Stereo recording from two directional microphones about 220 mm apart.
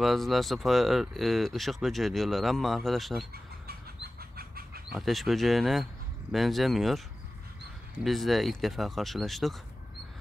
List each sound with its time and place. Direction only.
0.0 s speech: centre (ahead or behind)
3.6 s bird: 45° right (ahead or behind)
4.9 s speech: centre (ahead or behind)
8.0 s speech: centre (ahead or behind)